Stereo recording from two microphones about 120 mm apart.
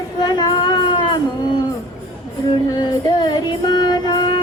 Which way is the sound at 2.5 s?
35° left (ahead or behind).